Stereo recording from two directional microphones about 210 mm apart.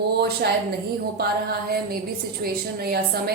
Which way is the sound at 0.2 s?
50° right (ahead or behind).